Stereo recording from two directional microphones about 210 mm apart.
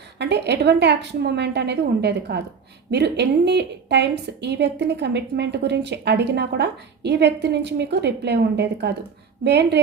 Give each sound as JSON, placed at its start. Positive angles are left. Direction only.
{"t": 0.2, "sound": "a woman's voice", "side_deg": -55}